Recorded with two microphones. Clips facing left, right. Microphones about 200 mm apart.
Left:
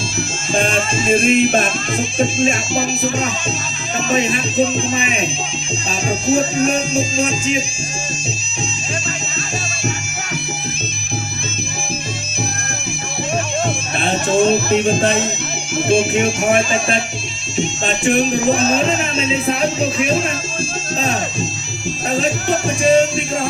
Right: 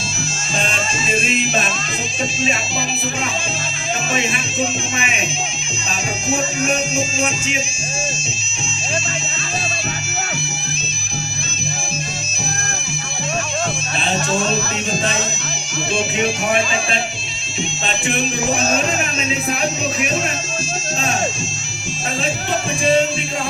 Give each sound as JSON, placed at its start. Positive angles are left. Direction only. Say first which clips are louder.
{"t": 0.5, "sound": "music", "louder": "left 6 dB", "side_deg": 55}
{"t": 4.1, "sound": "music", "louder": "left 8 dB", "side_deg": 40}
{"t": 6.2, "sound": "music", "louder": "left 5 dB", "side_deg": 35}
{"t": 14.0, "sound": "music", "louder": "left 6 dB", "side_deg": 55}
{"t": 22.1, "sound": "music", "louder": "left 4 dB", "side_deg": 45}